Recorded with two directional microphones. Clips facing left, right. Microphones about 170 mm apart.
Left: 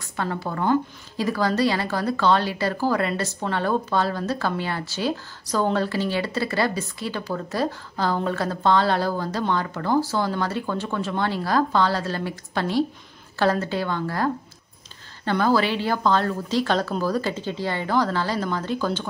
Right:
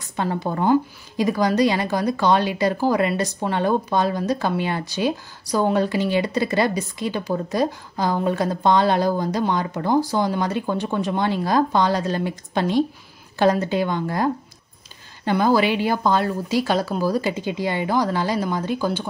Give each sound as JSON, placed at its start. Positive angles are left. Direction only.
{"t": 0.0, "sound": "a woman's voice", "side_deg": -20}